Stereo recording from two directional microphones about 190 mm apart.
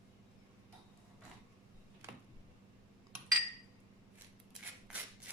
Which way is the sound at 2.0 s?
10° right (ahead or behind).